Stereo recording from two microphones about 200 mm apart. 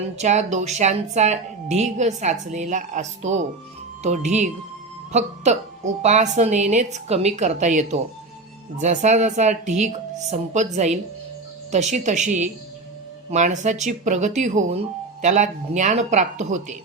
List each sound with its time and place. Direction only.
0.2 s a woman's voice: 35° right (ahead or behind)